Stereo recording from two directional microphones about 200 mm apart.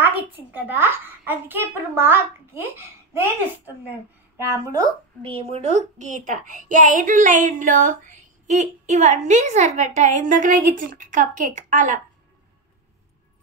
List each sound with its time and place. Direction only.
0.0 s a child's voice: 10° right (ahead or behind)
5.2 s a woman's voice: 30° right (ahead or behind)